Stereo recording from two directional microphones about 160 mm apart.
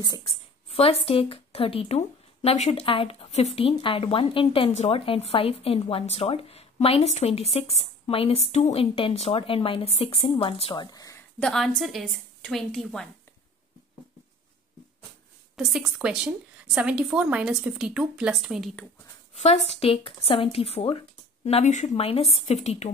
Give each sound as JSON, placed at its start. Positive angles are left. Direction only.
{"t": 0.7, "sound": "speech", "side_deg": 40}
{"t": 11.3, "sound": "speech", "side_deg": 5}
{"t": 15.5, "sound": "speech", "side_deg": 0}
{"t": 19.4, "sound": "speech", "side_deg": 40}